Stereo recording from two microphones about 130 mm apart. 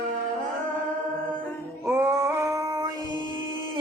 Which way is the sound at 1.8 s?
20° right (ahead or behind).